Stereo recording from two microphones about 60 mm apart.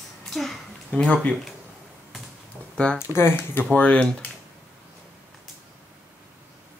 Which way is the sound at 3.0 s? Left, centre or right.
Left.